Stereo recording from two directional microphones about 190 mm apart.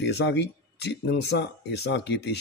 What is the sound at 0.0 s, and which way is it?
Speech, 65° left (ahead or behind).